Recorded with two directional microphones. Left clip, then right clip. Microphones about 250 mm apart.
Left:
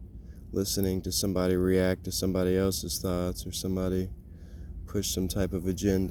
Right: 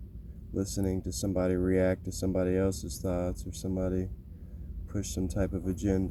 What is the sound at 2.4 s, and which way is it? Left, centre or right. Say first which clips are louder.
Speech: left 2 dB; left.